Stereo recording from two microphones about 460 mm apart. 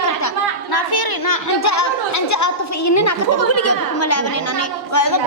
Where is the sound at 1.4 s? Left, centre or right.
Left.